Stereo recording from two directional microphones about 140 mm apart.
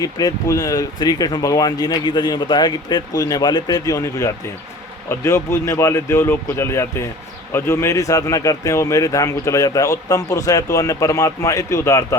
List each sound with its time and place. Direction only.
0.0 s a man's voice: 25° left (ahead or behind)